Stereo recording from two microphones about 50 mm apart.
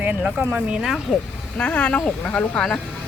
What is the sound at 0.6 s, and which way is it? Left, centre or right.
Speech, centre.